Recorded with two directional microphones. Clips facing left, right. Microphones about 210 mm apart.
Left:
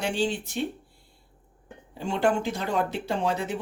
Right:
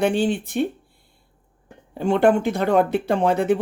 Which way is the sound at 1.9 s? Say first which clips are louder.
Right 8 dB; 55° right (ahead or behind).